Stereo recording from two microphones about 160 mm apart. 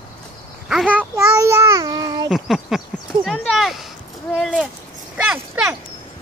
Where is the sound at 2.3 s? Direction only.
Centre (ahead or behind).